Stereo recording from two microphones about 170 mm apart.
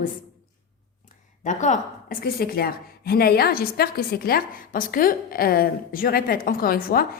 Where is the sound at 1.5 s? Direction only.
45° left (ahead or behind).